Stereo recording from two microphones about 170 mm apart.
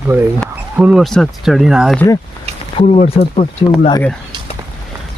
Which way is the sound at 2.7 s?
40° left (ahead or behind).